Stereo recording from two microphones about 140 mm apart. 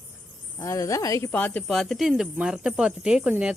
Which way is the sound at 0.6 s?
20° left (ahead or behind).